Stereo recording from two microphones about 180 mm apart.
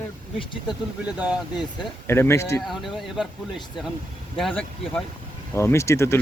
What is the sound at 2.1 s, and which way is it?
Speech, 15° left (ahead or behind).